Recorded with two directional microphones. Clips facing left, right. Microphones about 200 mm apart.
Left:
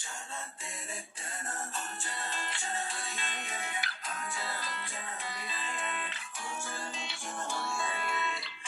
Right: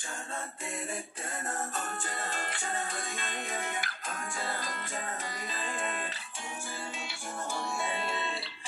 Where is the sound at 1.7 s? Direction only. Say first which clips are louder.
Right 4 dB; 50° right (ahead or behind).